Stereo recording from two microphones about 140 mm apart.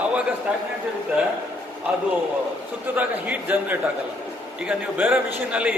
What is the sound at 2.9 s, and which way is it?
A man's voice, 10° right (ahead or behind).